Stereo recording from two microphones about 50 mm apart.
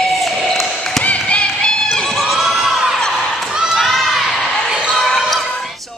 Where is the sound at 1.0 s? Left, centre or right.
Left.